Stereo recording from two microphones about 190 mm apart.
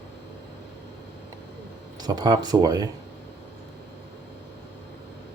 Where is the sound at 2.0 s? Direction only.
20° right (ahead or behind).